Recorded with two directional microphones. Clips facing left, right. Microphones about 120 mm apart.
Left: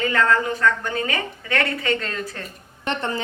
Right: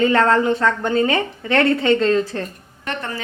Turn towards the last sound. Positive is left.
turn(degrees=25)  # may be behind; listen again after turning